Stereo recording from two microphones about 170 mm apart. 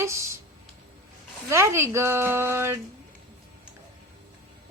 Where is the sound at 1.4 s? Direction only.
15° right (ahead or behind).